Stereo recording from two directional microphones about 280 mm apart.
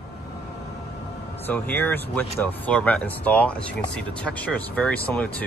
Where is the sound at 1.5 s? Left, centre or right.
Centre.